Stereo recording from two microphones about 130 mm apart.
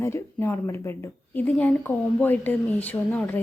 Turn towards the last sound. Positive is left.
turn(degrees=15)  # may be behind; listen again after turning